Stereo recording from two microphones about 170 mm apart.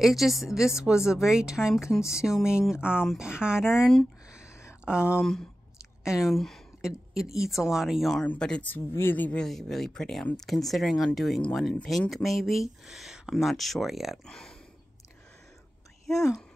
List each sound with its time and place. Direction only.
0.0 s speech: centre (ahead or behind)
4.5 s a sound: 15° left (ahead or behind)
6.0 s a woman's voice: 5° right (ahead or behind)
16.1 s speech: centre (ahead or behind)